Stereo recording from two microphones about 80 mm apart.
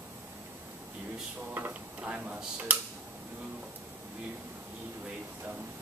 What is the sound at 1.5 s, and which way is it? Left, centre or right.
Speech, right.